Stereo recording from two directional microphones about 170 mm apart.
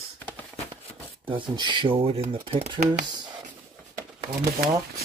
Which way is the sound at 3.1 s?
25° right (ahead or behind).